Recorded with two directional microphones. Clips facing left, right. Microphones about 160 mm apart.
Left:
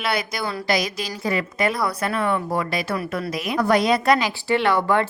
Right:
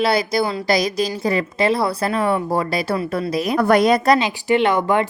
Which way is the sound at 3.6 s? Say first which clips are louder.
Right 3 dB; 55° right (ahead or behind).